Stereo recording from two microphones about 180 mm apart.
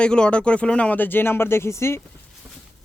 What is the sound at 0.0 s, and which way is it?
Speech, 5° left (ahead or behind).